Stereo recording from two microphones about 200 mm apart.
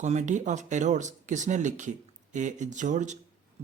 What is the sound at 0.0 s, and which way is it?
Speech, 35° right (ahead or behind).